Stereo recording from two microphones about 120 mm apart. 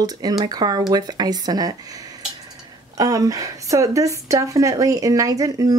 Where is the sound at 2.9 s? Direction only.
30° right (ahead or behind).